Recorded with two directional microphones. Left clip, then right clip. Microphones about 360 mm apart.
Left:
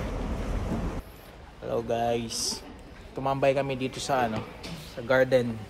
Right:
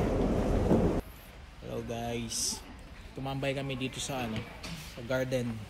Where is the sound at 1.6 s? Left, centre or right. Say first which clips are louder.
Left 10 dB; centre.